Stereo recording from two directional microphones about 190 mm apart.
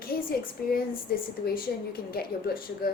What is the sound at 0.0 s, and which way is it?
A woman's voice, 50° left (ahead or behind).